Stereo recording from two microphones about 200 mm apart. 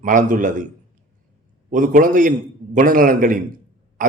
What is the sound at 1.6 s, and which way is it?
A man's voice, 40° right (ahead or behind).